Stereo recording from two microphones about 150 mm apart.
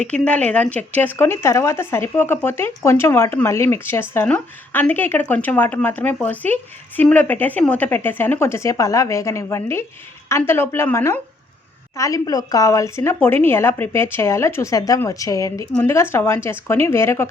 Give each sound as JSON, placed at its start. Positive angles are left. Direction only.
{"t": 0.0, "sound": "a woman's voice", "side_deg": 10}